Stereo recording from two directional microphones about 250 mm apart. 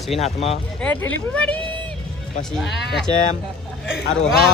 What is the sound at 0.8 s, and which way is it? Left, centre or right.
Speech, centre.